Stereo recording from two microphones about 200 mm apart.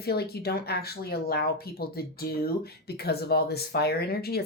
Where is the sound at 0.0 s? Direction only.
50° left (ahead or behind).